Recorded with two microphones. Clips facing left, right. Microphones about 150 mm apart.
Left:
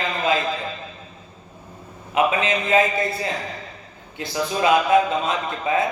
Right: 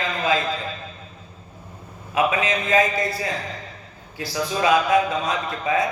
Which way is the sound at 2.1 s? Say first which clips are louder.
Left 1 dB; 25° left (ahead or behind).